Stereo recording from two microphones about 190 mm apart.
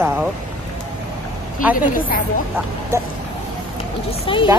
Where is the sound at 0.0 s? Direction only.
10° right (ahead or behind).